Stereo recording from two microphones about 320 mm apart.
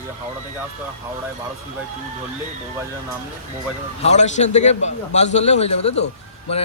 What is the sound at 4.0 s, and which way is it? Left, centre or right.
A man's voice, left.